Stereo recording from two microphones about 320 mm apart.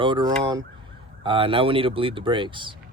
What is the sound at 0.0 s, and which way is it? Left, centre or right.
Speech, centre.